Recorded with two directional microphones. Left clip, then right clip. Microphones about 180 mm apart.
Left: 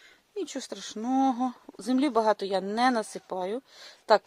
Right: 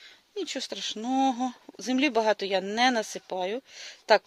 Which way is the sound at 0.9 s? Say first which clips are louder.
Left 2 dB; 5° right (ahead or behind).